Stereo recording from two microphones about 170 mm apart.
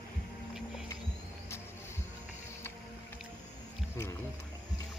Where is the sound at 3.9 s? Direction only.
15° left (ahead or behind).